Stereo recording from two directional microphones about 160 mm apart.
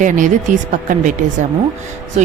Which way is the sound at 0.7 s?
55° right (ahead or behind).